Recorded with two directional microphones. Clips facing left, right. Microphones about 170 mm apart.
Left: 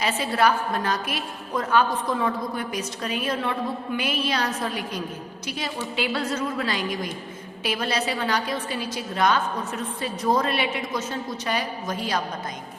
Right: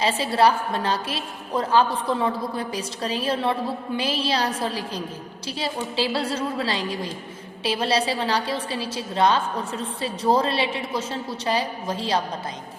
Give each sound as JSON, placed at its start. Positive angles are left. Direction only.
{"t": 0.0, "sound": "a woman's voice", "side_deg": -30}